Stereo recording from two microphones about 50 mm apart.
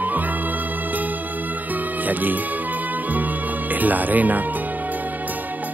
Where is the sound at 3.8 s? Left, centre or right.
Right.